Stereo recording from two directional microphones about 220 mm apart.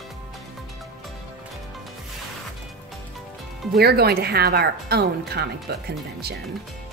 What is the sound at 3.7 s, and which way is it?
A woman's voice, 45° right (ahead or behind).